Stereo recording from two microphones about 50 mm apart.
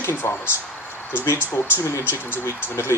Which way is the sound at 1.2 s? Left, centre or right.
Left.